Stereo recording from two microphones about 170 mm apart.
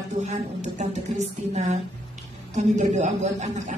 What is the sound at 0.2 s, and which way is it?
A woman's voice, 45° right (ahead or behind).